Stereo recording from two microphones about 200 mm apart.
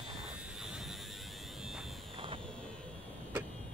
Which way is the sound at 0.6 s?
Centre (ahead or behind).